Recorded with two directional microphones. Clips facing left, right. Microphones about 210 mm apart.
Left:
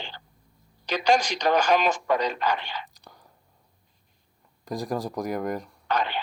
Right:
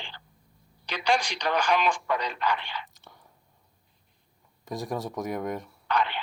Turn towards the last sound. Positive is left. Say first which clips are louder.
# left 1 dB
turn(degrees=40)  # may be behind; listen again after turning